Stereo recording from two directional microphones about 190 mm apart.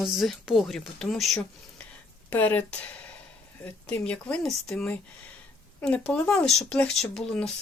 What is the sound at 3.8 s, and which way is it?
Speech, 5° left (ahead or behind).